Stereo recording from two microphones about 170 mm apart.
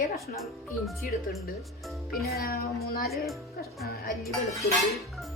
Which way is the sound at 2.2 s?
65° left (ahead or behind).